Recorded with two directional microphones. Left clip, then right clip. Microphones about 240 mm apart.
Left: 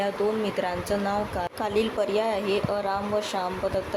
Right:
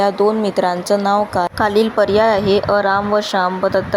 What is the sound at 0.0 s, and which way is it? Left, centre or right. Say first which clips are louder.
Speech: right 11 dB; right.